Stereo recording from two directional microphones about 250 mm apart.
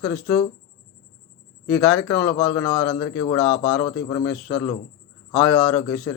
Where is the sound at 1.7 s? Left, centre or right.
Centre.